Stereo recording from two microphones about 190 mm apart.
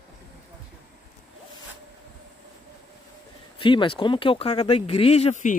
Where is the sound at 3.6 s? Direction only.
25° left (ahead or behind).